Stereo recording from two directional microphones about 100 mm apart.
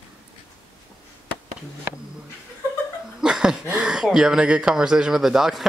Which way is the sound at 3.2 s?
5° right (ahead or behind).